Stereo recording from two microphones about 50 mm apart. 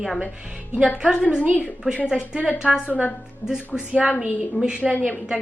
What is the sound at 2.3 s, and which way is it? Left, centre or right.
A woman's voice, centre.